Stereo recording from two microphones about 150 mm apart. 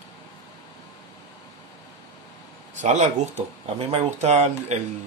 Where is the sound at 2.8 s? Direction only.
50° right (ahead or behind).